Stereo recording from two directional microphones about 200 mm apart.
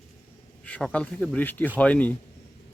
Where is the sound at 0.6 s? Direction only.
5° left (ahead or behind).